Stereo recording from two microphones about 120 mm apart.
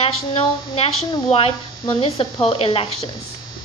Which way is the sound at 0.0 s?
55° left (ahead or behind).